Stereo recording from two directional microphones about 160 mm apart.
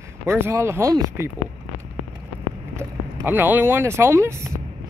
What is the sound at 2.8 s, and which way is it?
Speech, 10° right (ahead or behind).